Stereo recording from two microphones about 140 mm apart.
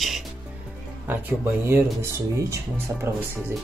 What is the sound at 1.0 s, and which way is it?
Speech, 15° right (ahead or behind).